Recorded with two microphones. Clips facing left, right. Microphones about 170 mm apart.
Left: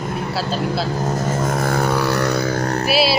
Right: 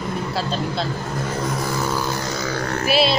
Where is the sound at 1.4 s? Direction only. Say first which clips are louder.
Left 5 dB; 50° left (ahead or behind).